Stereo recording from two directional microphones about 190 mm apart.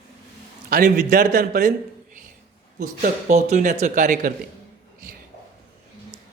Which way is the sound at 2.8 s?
45° right (ahead or behind).